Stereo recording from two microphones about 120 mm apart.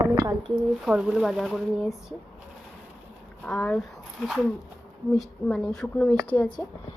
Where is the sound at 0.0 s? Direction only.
35° right (ahead or behind).